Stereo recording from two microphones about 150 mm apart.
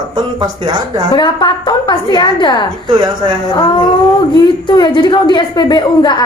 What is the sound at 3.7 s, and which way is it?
Speech, 30° left (ahead or behind).